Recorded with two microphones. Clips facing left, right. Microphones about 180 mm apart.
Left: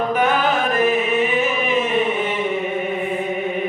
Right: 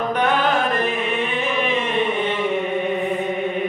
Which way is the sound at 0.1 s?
5° left (ahead or behind).